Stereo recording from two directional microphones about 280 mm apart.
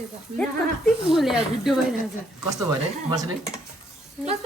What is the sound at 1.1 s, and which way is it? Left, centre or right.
Speech, centre.